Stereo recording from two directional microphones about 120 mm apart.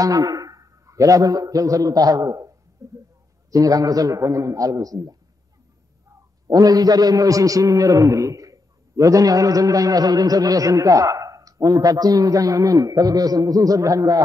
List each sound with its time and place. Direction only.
0.0 s a sound: 30° right (ahead or behind)
2.8 s a man's voice: 25° right (ahead or behind)
6.4 s a man's voice: 30° right (ahead or behind)